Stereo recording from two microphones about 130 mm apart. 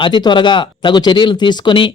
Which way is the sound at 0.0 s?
35° left (ahead or behind).